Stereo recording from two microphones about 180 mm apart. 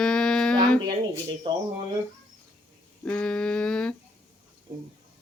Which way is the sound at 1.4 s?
25° right (ahead or behind).